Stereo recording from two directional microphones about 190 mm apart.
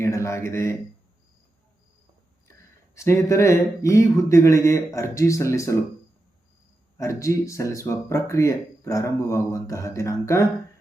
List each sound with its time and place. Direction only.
0.0 s speech: 15° left (ahead or behind)
2.9 s speech: 15° left (ahead or behind)
7.0 s speech: 15° left (ahead or behind)